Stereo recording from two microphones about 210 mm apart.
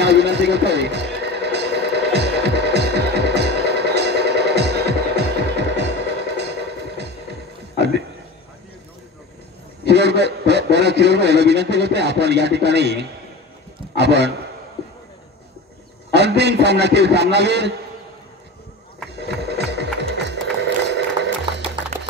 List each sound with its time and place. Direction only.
0.0 s music: 55° right (ahead or behind)
9.8 s a man's voice: 55° right (ahead or behind)
16.1 s a man's voice: 55° right (ahead or behind)
19.1 s a sound: 55° right (ahead or behind)